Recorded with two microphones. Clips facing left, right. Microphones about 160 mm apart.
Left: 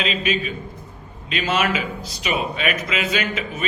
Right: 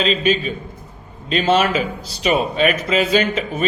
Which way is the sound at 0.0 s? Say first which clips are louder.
Right 5 dB; 30° right (ahead or behind).